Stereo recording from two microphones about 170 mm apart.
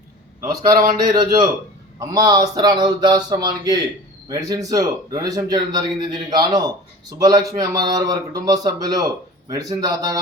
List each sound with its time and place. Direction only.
1.1 s a man's voice: 25° right (ahead or behind)